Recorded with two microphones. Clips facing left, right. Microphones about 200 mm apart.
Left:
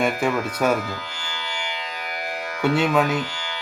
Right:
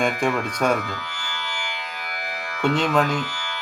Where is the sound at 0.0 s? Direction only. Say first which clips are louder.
Left 1 dB; 5° left (ahead or behind).